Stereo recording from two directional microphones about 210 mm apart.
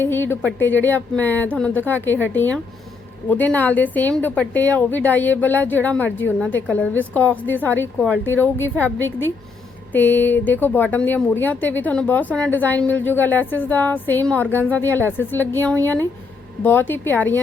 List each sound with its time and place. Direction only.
0.0 s speech: 10° left (ahead or behind)